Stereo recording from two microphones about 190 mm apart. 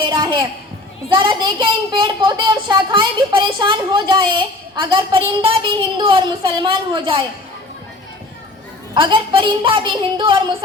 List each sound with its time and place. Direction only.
0.1 s a man's voice: 25° right (ahead or behind)
9.0 s speech: 25° right (ahead or behind)